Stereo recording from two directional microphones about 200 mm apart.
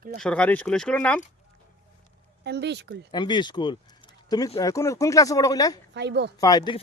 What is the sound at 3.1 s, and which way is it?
Speech, 20° left (ahead or behind).